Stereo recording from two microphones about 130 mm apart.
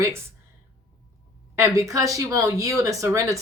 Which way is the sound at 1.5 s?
25° right (ahead or behind).